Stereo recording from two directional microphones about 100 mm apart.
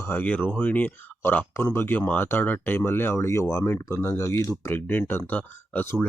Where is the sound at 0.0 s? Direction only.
20° left (ahead or behind).